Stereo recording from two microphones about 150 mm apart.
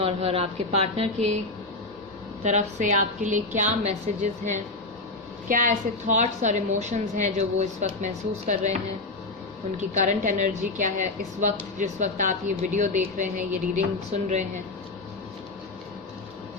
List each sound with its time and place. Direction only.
0.0 s a woman's voice: 40° right (ahead or behind)
2.4 s a woman's voice: 50° right (ahead or behind)
9.9 s a woman's voice: 55° right (ahead or behind)